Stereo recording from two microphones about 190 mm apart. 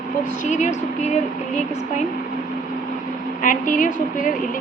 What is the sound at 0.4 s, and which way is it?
Speech, 40° left (ahead or behind).